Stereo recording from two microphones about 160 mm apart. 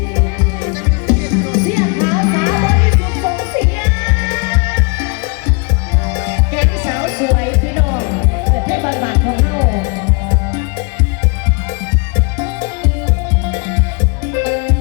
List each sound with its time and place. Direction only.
0.3 s music: 25° right (ahead or behind)
6.1 s music: 20° right (ahead or behind)
12.4 s music: 15° right (ahead or behind)
14.4 s music: 20° right (ahead or behind)